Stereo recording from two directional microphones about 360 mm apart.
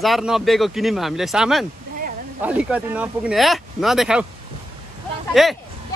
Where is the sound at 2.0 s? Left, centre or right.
Right.